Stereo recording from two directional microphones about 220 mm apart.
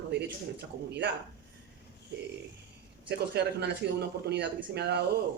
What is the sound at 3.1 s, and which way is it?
Speech, 50° right (ahead or behind).